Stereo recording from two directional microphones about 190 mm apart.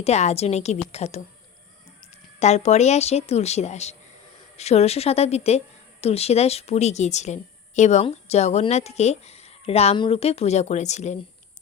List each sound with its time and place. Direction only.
0.0 s speech: 35° left (ahead or behind)
2.4 s speech: 35° left (ahead or behind)